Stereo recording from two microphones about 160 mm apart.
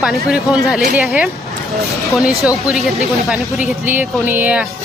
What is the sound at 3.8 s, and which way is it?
Speech, 15° right (ahead or behind).